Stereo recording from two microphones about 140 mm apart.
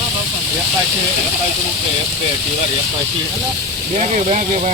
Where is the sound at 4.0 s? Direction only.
60° right (ahead or behind).